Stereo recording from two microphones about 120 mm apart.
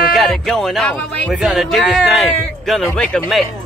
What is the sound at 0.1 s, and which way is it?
Speech, centre (ahead or behind).